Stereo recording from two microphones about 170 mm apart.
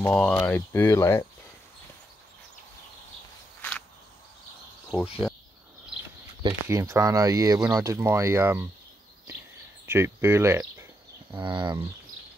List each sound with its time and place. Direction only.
0.0 s speech: 10° left (ahead or behind)
3.6 s a sound: 10° left (ahead or behind)
5.2 s a sound: centre (ahead or behind)
6.4 s speech: 15° right (ahead or behind)
9.8 s speech: 15° right (ahead or behind)
11.3 s speech: 30° right (ahead or behind)